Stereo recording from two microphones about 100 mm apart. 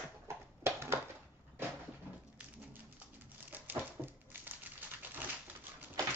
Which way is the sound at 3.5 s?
20° right (ahead or behind).